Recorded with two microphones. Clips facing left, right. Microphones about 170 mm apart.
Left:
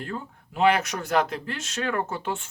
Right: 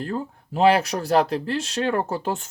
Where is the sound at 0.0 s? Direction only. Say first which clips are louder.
Right 6 dB; 35° right (ahead or behind).